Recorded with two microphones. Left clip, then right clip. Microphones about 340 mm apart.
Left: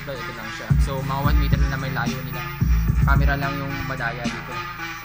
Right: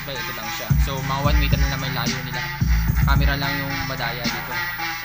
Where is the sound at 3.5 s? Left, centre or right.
Right.